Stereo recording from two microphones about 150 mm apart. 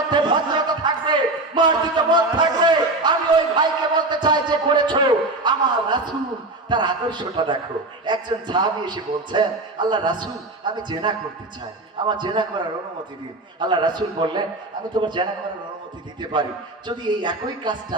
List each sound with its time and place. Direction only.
0.1 s a sound: 30° right (ahead or behind)
4.1 s a man's voice: 30° right (ahead or behind)
13.6 s a man's voice: 30° right (ahead or behind)
16.3 s a man's voice: 30° right (ahead or behind)